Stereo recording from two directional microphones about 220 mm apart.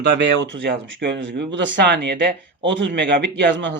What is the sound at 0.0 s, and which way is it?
A man's voice, 50° right (ahead or behind).